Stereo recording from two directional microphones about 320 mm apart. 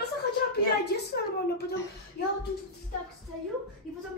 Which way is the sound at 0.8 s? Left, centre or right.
Left.